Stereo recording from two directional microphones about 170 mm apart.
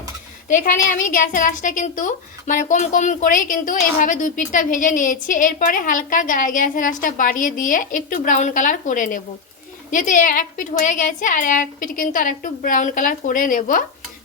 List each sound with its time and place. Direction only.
0.4 s a woman's voice: 50° left (ahead or behind)